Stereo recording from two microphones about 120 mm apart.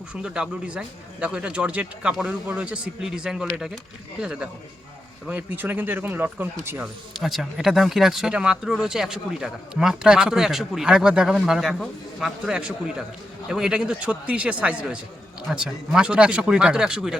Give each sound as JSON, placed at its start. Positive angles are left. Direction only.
{"t": 0.1, "sound": "speech", "side_deg": -5}
{"t": 6.8, "sound": "speech", "side_deg": 0}